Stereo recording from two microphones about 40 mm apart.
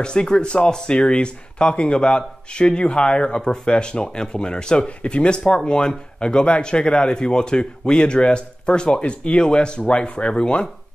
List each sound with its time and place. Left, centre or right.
0.0 s speech: left